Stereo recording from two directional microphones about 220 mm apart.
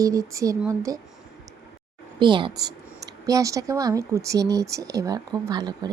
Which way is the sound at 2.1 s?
20° right (ahead or behind).